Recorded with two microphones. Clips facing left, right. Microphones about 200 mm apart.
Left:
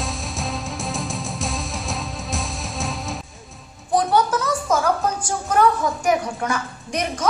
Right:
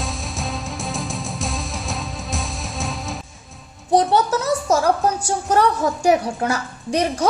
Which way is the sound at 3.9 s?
35° right (ahead or behind).